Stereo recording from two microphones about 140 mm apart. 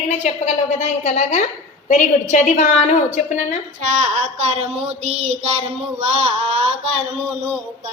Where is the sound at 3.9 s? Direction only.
55° right (ahead or behind).